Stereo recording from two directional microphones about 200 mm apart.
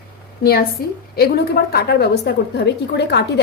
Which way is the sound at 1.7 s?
55° left (ahead or behind).